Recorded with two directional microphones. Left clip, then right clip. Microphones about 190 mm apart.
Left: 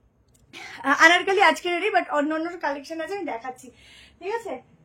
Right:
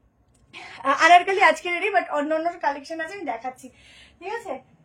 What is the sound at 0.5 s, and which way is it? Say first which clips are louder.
A woman's voice: left 1 dB; 30° left (ahead or behind).